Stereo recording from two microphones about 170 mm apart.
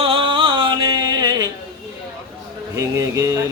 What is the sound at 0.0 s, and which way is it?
Music, 30° right (ahead or behind).